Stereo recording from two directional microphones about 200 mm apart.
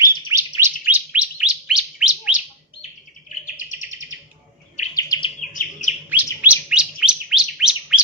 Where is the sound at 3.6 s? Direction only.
40° left (ahead or behind).